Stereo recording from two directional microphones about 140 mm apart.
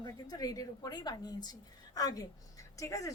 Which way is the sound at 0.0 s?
30° left (ahead or behind).